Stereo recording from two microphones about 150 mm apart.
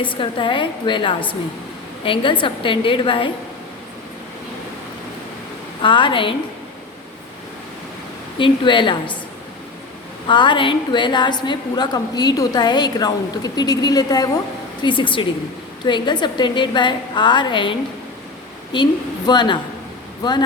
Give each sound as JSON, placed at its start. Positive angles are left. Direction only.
{"t": 0.0, "sound": "a woman's voice", "side_deg": 35}
{"t": 5.8, "sound": "a woman's voice", "side_deg": 35}
{"t": 8.4, "sound": "a woman's voice", "side_deg": 30}
{"t": 10.2, "sound": "a woman's voice", "side_deg": 30}